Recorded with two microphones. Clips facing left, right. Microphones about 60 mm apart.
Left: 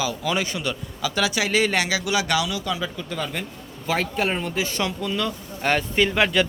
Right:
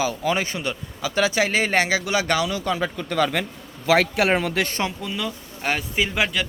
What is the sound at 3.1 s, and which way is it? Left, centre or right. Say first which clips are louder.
Speech: right 10 dB; right.